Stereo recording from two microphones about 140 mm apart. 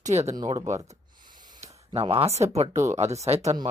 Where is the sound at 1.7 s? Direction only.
45° right (ahead or behind).